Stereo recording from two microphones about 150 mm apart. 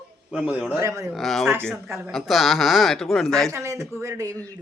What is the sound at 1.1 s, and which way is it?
Speech, centre (ahead or behind).